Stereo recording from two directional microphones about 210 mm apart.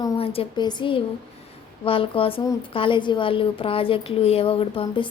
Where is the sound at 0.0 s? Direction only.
25° left (ahead or behind).